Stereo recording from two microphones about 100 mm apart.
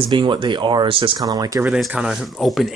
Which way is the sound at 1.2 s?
40° right (ahead or behind).